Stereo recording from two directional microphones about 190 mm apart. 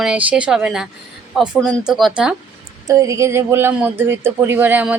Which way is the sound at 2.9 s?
15° right (ahead or behind).